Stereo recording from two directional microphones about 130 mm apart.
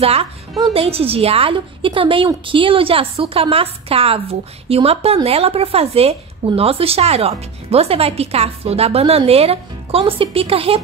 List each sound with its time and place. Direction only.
0.0 s a woman's voice: 50° right (ahead or behind)